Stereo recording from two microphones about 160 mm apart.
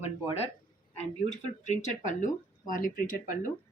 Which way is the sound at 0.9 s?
45° left (ahead or behind).